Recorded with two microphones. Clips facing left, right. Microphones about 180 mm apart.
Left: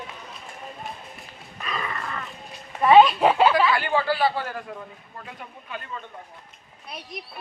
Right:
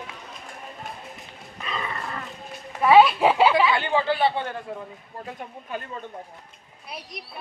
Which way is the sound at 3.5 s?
20° right (ahead or behind).